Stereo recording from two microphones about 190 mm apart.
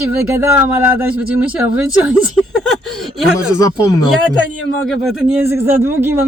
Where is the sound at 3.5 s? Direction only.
20° left (ahead or behind).